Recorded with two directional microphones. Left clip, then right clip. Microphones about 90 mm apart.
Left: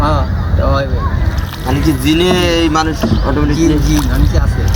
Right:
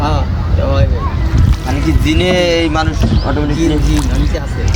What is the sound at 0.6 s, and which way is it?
Vehicle, 5° left (ahead or behind).